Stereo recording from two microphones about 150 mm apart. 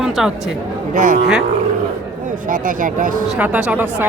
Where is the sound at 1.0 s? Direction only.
65° right (ahead or behind).